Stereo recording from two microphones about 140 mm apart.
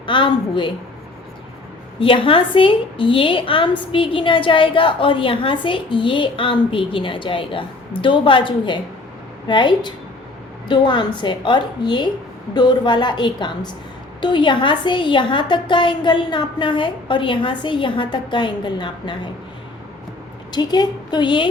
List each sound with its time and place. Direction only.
0.0 s a woman's voice: 35° left (ahead or behind)
2.0 s a woman's voice: 40° left (ahead or behind)
20.5 s a woman's voice: 30° left (ahead or behind)